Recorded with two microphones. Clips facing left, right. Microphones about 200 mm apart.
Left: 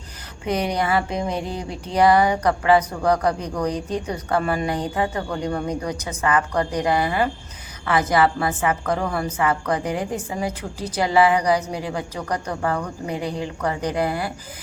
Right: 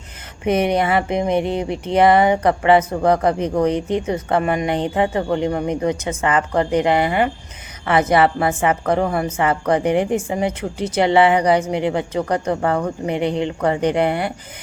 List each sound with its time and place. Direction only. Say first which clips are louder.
0.4 s speech: right 5 dB; 25° right (ahead or behind)